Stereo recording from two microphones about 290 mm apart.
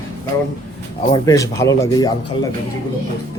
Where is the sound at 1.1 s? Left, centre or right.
Centre.